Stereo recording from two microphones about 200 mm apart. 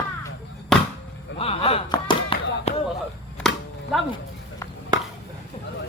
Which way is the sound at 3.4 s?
Centre (ahead or behind).